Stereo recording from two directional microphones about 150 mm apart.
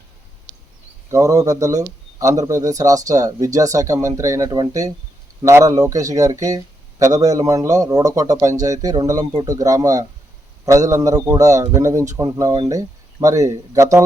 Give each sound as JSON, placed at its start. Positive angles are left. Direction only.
{"t": 1.1, "sound": "speech", "side_deg": -20}